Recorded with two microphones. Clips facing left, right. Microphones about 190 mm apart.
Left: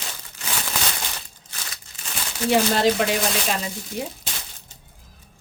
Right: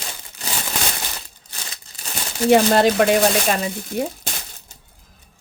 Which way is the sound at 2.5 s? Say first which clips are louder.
Right 5 dB; 55° right (ahead or behind).